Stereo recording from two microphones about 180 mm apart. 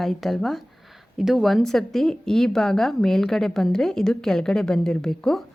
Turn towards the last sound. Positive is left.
turn(degrees=0)  # may be behind; listen again after turning